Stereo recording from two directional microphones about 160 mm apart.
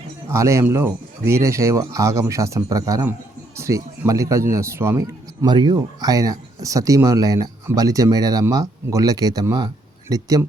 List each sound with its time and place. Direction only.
0.3 s speech: 20° right (ahead or behind)